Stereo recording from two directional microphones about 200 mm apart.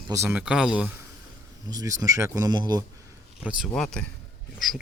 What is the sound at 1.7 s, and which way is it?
Speech, 15° right (ahead or behind).